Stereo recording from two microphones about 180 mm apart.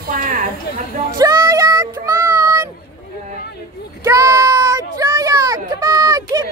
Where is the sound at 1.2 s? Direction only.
20° right (ahead or behind).